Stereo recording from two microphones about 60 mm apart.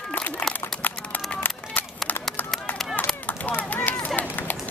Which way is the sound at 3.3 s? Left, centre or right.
Left.